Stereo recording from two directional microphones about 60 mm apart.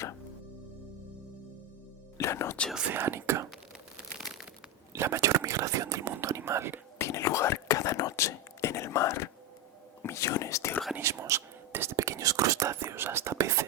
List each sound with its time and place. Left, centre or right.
2.1 s music: left
2.9 s speech: right
4.2 s crumpling: centre
4.9 s whispering: right
7.0 s whispering: left
11.0 s speech: right
11.7 s whispering: right
11.9 s whispering: right